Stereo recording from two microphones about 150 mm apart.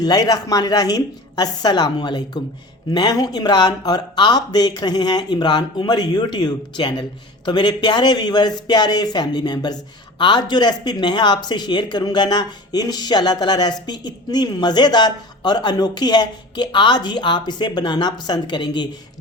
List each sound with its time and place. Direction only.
0.0 s a man's voice: 25° left (ahead or behind)